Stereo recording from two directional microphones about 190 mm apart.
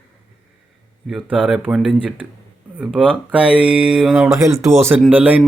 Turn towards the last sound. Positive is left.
turn(degrees=-10)  # may be behind; listen again after turning